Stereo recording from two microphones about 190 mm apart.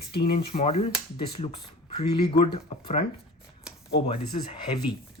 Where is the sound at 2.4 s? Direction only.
30° left (ahead or behind).